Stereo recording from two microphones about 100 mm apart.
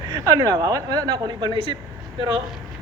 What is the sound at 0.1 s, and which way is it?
A woman's voice, 35° right (ahead or behind).